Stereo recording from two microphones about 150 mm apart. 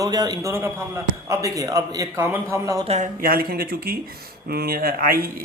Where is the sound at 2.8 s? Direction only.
45° right (ahead or behind).